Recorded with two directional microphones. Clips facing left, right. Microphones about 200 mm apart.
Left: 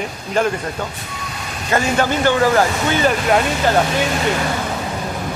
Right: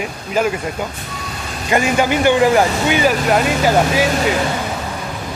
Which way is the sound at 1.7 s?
15° right (ahead or behind).